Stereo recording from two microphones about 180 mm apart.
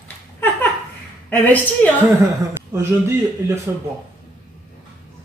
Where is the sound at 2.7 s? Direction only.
15° right (ahead or behind).